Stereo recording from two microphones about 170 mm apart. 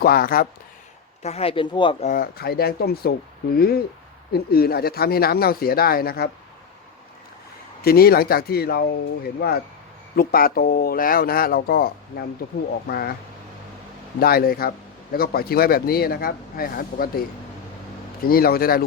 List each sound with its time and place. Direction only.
0.0 s speech: 60° left (ahead or behind)
1.2 s speech: 40° left (ahead or behind)
2.0 s speech: 60° left (ahead or behind)
7.8 s speech: 65° left (ahead or behind)
14.2 s speech: 60° left (ahead or behind)
18.2 s speech: 60° left (ahead or behind)